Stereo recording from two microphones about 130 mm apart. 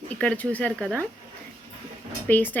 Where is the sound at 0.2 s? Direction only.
10° left (ahead or behind).